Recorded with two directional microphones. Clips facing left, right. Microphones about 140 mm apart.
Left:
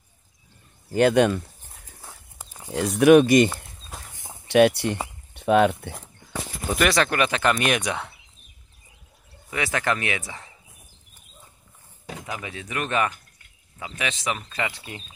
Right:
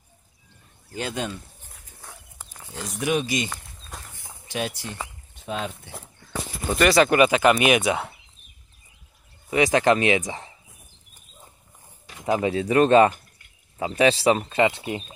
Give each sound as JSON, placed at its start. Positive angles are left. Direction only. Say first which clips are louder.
{"t": 0.9, "sound": "speech", "louder": "left 12 dB", "side_deg": 65}
{"t": 2.0, "sound": "walk", "louder": "even", "side_deg": 10}
{"t": 2.7, "sound": "speech", "louder": "left 11 dB", "side_deg": 65}
{"t": 3.4, "sound": "a sound", "louder": "left 7 dB", "side_deg": 5}
{"t": 4.5, "sound": "speech", "louder": "left 13 dB", "side_deg": 70}
{"t": 5.3, "sound": "a sound", "louder": "left 13 dB", "side_deg": 70}
{"t": 6.7, "sound": "speech", "louder": "right 4 dB", "side_deg": 0}
{"t": 9.5, "sound": "speech", "louder": "right 7 dB", "side_deg": -20}
{"t": 12.3, "sound": "speech", "louder": "right 14 dB", "side_deg": -35}